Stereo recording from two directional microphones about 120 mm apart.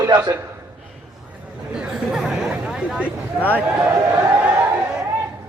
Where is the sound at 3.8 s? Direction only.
15° right (ahead or behind).